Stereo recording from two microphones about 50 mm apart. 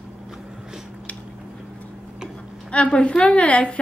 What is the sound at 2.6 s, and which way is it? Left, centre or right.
A woman's voice, left.